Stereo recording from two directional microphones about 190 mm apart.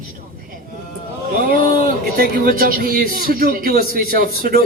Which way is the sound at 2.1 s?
50° right (ahead or behind).